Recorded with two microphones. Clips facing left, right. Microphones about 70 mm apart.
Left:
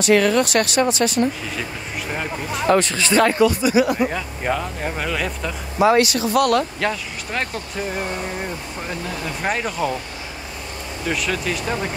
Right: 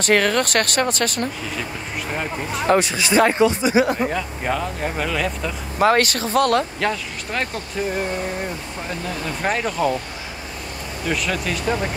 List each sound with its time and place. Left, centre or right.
0.0 s speech: right
2.8 s speech: centre; by 4.1 s right
4.1 s speech: centre
5.8 s speech: right
6.8 s speech: centre
9.4 s speech: centre
11.1 s speech: centre